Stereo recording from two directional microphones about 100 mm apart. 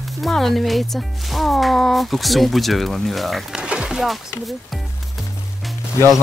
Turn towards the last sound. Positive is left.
turn(degrees=30)  # may be behind; listen again after turning